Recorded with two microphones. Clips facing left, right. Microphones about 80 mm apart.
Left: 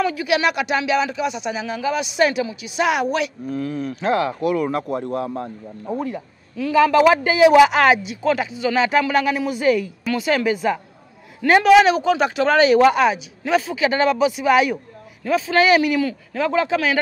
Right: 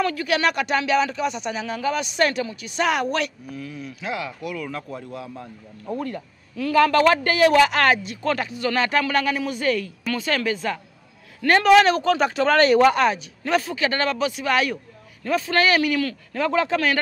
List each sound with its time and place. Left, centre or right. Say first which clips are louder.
0.0 s speech: left 2 dB; centre
3.4 s speech: left 9 dB; left
5.9 s speech: left 3 dB; centre
16.3 s speech: left 2 dB; centre